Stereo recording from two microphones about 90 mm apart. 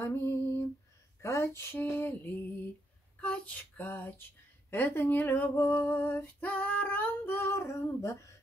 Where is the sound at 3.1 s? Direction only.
15° left (ahead or behind).